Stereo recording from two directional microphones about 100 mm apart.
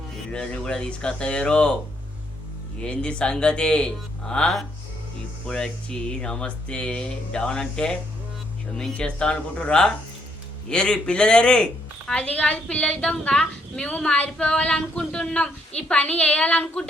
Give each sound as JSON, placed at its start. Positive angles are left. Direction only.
{"t": 0.3, "sound": "a woman's voice", "side_deg": 10}
{"t": 2.8, "sound": "a woman's voice", "side_deg": 10}